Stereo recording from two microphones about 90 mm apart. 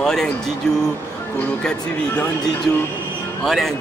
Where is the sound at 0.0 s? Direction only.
5° left (ahead or behind).